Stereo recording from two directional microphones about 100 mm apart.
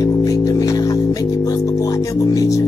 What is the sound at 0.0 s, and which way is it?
Music, 35° left (ahead or behind).